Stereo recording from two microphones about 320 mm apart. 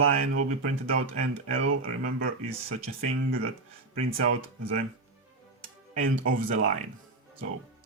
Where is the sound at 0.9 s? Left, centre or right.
Right.